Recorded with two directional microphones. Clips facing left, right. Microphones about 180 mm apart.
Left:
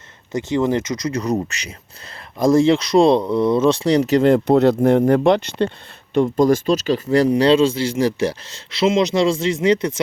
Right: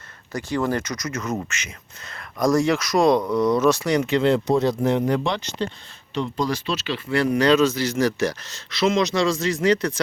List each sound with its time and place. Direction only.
0.3 s speech: 20° left (ahead or behind); by 4.5 s 45° left (ahead or behind)
4.5 s speech: 60° left (ahead or behind); by 10.0 s 25° left (ahead or behind)